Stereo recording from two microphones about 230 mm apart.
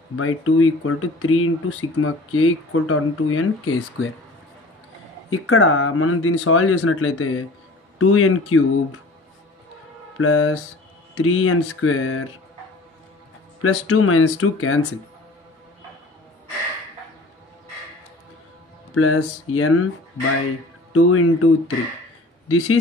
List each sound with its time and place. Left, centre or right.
0.1 s speech: left
5.3 s speech: left
10.1 s speech: left
13.6 s speech: left
18.9 s speech: left
20.9 s speech: left